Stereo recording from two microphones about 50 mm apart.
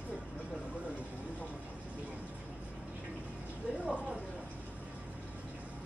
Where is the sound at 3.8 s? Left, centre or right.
Right.